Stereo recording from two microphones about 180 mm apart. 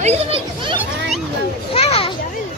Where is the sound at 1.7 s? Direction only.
35° left (ahead or behind).